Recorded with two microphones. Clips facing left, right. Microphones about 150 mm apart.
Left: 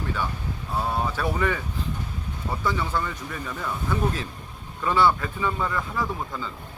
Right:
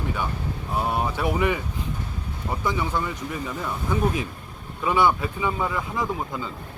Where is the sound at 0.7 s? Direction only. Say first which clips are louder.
Right 1 dB; 20° right (ahead or behind).